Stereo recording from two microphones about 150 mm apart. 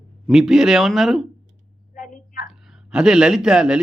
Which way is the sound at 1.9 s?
60° left (ahead or behind).